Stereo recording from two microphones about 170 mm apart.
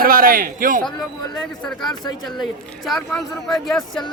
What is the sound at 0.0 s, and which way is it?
Speech, 55° right (ahead or behind).